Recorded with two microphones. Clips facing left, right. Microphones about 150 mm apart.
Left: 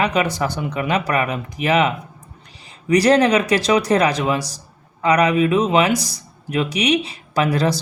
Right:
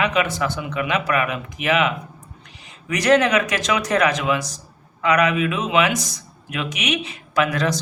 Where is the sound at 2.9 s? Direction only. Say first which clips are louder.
Left 3 dB; 35° left (ahead or behind).